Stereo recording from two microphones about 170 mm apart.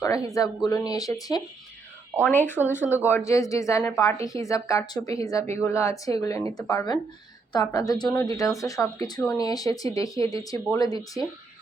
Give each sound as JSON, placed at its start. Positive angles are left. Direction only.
{"t": 0.0, "sound": "a woman's voice", "side_deg": 20}
{"t": 2.1, "sound": "a woman's voice", "side_deg": 10}